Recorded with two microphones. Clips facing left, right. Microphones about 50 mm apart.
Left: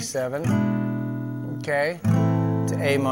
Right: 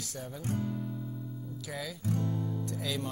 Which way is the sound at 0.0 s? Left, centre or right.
Left.